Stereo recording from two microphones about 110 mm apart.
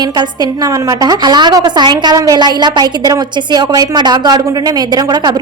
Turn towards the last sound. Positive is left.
turn(degrees=-40)  # may be behind; listen again after turning